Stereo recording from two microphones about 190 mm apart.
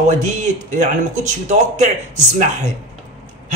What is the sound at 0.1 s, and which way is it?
A man's voice, 40° right (ahead or behind).